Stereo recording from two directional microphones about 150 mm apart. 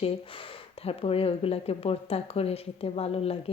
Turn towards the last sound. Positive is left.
turn(degrees=40)  # may be behind; listen again after turning